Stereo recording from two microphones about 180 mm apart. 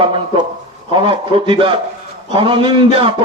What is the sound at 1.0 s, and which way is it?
A man's voice, 30° right (ahead or behind).